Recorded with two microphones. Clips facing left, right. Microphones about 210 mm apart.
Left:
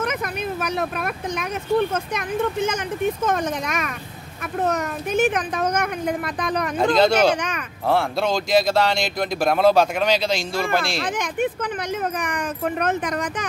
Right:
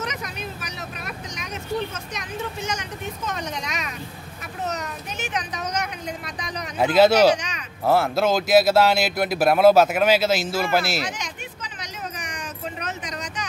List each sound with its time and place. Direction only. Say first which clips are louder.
0.0 s a child's voice: left 6 dB; 55° left (ahead or behind)
6.8 s speech: right 2 dB; 5° right (ahead or behind)
11.0 s speech: left 7 dB; 55° left (ahead or behind)